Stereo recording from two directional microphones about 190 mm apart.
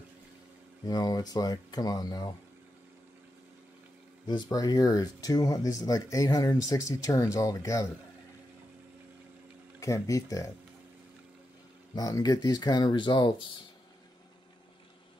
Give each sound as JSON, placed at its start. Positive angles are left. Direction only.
{"t": 0.8, "sound": "speech", "side_deg": 20}
{"t": 4.3, "sound": "speech", "side_deg": 20}
{"t": 9.8, "sound": "speech", "side_deg": 15}
{"t": 11.9, "sound": "speech", "side_deg": 20}